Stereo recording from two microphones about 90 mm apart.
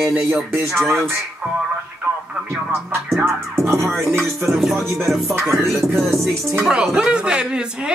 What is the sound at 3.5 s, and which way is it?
Music, 30° right (ahead or behind).